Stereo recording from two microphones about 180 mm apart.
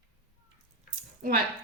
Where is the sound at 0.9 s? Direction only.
55° right (ahead or behind).